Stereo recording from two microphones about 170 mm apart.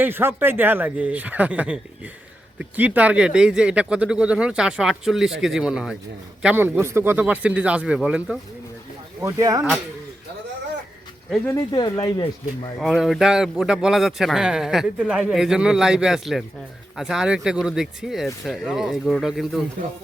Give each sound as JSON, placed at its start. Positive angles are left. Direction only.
{"t": 0.0, "sound": "a man's voice", "side_deg": -15}
{"t": 9.2, "sound": "speech", "side_deg": -20}
{"t": 11.4, "sound": "speech", "side_deg": 20}
{"t": 12.8, "sound": "a man's voice", "side_deg": 0}